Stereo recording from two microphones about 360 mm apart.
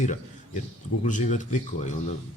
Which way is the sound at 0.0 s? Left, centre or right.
Centre.